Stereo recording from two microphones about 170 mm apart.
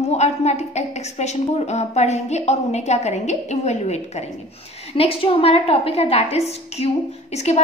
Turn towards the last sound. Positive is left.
turn(degrees=40)  # may be behind; listen again after turning